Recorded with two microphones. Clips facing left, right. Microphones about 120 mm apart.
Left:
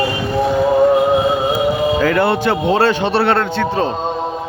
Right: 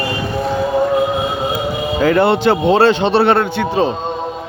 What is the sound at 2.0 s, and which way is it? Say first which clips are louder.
A man's voice: right 2 dB; 25° right (ahead or behind).